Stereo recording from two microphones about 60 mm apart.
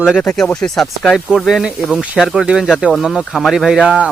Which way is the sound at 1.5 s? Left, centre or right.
Centre.